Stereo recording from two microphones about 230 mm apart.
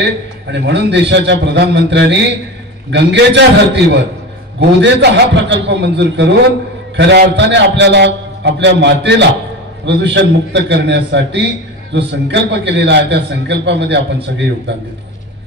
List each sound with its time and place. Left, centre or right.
0.0 s a man's voice: right
5.0 s a man's voice: right